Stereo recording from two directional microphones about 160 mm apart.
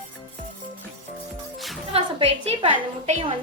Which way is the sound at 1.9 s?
40° right (ahead or behind).